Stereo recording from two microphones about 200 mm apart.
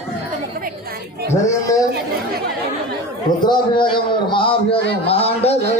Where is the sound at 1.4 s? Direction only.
15° left (ahead or behind).